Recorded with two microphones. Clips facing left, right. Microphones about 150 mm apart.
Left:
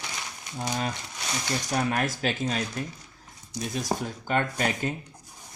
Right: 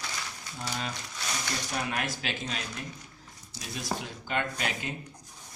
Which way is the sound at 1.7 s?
45° left (ahead or behind).